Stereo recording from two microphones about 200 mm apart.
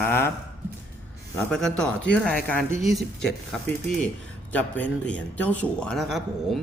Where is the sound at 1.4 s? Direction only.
Centre (ahead or behind).